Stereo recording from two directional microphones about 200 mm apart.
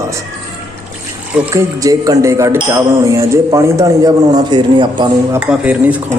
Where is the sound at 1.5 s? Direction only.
15° right (ahead or behind).